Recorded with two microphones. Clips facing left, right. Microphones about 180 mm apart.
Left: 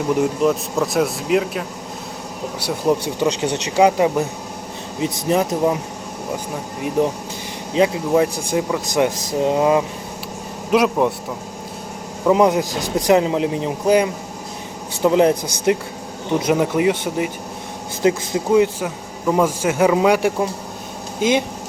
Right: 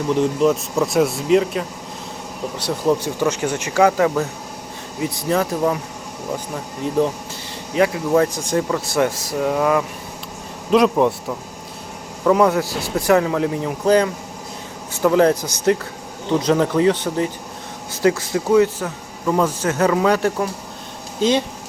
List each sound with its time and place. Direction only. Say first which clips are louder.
0.2 s speech: right 1 dB; centre (ahead or behind); by 5.7 s 20° left (ahead or behind)
7.7 s speech: even; 20° left (ahead or behind)
10.7 s speech: right 2 dB; 5° left (ahead or behind)
12.2 s speech: left 1 dB; 15° left (ahead or behind)